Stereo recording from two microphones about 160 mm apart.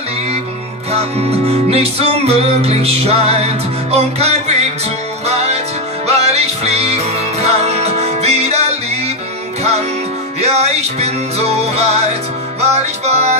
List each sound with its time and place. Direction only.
1.5 s music: 40° right (ahead or behind)
9.6 s music: 40° right (ahead or behind)